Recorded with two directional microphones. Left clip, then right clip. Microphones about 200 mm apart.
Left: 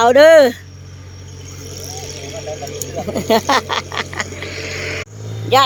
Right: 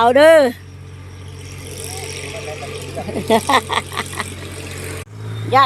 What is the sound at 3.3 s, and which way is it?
Speech, 10° left (ahead or behind).